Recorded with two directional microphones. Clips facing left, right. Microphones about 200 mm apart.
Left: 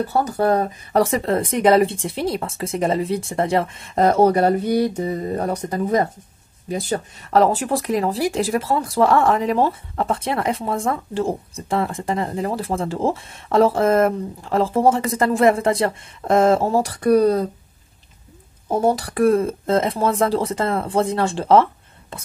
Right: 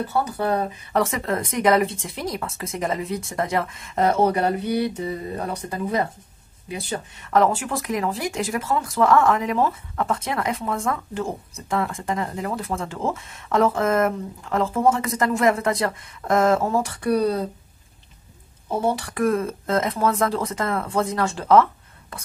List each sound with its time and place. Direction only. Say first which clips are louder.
0.2 s speech: left 5 dB; 40° left (ahead or behind)
18.7 s speech: left 4 dB; 40° left (ahead or behind)